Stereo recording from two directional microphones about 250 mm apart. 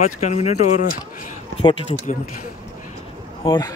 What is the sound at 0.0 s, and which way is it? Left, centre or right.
Speech, left.